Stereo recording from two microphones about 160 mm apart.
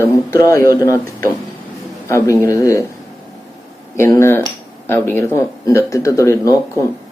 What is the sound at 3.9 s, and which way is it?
Speech, 15° left (ahead or behind).